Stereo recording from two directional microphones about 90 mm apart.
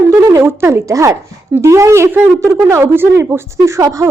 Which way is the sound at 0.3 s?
30° right (ahead or behind).